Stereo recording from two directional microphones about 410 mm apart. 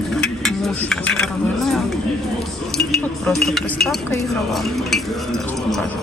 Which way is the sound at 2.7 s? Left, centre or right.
Centre.